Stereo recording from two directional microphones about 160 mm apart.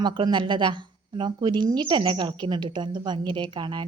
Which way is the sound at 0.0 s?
30° right (ahead or behind).